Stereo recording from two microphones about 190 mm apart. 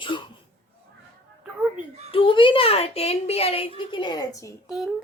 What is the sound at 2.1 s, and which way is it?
A woman's voice, 25° left (ahead or behind).